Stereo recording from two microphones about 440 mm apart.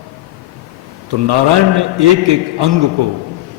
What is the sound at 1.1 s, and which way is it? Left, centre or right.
A man's voice, right.